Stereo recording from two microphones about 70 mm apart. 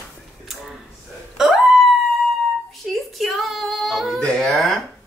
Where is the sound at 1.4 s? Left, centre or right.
Centre.